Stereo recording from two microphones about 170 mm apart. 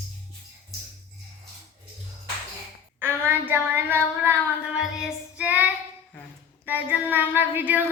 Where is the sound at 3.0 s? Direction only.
15° right (ahead or behind).